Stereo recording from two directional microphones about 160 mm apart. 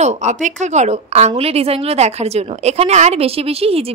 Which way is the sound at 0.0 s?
45° right (ahead or behind).